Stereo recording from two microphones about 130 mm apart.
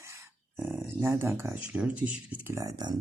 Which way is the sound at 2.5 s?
30° right (ahead or behind).